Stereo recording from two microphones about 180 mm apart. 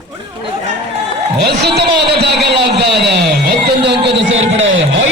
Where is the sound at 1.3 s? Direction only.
65° right (ahead or behind).